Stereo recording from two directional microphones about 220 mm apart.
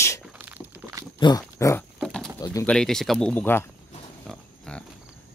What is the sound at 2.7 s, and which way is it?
Speech, centre (ahead or behind).